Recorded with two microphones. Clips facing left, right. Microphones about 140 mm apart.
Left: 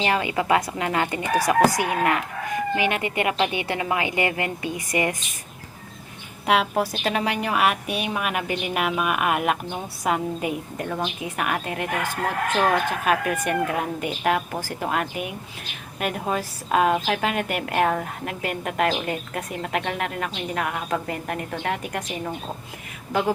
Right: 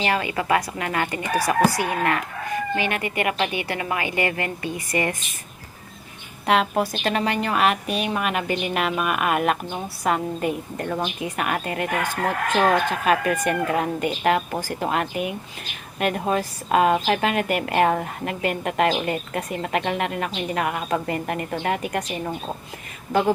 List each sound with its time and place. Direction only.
0.0 s speech: 20° left (ahead or behind)
6.4 s a woman's voice: 5° left (ahead or behind)
10.8 s a woman's voice: 10° right (ahead or behind)
11.2 s a woman's voice: centre (ahead or behind)
13.1 s a woman's voice: 5° left (ahead or behind)